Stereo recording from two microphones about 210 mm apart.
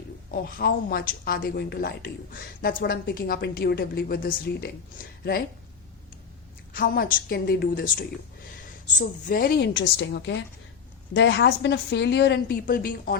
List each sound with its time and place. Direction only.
0.3 s a woman's voice: 45° left (ahead or behind)
6.7 s a woman's voice: 45° left (ahead or behind)